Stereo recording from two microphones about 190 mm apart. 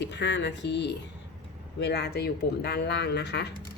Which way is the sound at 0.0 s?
70° left (ahead or behind).